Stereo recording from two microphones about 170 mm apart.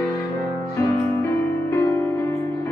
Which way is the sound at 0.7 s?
15° left (ahead or behind).